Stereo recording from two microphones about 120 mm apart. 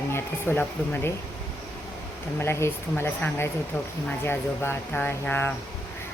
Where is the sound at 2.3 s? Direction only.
20° left (ahead or behind).